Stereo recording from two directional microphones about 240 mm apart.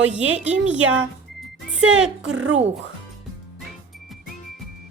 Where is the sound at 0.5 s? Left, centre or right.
Centre.